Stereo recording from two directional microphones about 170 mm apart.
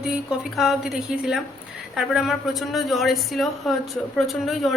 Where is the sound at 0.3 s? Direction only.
Centre (ahead or behind).